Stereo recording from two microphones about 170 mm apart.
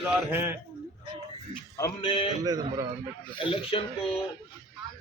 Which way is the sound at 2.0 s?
35° left (ahead or behind).